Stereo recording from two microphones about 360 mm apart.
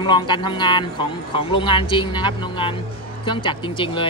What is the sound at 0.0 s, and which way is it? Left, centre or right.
A man's voice, centre.